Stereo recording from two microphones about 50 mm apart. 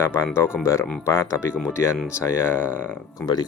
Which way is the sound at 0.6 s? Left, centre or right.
Left.